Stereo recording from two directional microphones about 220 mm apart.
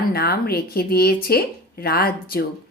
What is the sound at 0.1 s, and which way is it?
Speech, 45° left (ahead or behind).